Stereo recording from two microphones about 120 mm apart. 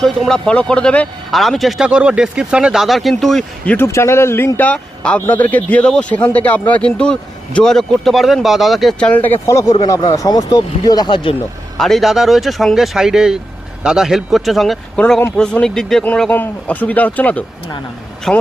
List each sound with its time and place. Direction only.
0.0 s speech: 5° left (ahead or behind)
3.8 s a man's voice: 25° left (ahead or behind); by 11.3 s 45° left (ahead or behind)
11.8 s a man's voice: centre (ahead or behind)